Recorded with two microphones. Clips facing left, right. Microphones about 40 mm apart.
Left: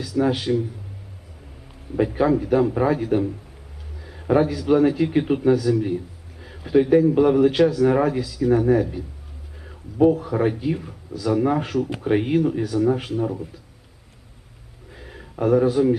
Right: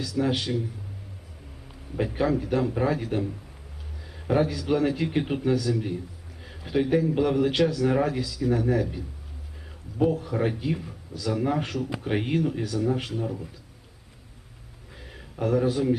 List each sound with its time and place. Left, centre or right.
0.0 s a man's voice: centre
2.0 s a man's voice: centre
14.9 s a sound: centre
15.6 s a man's voice: centre